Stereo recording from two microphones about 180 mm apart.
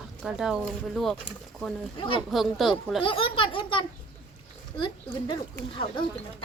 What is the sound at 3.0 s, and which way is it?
A child's voice, 30° left (ahead or behind).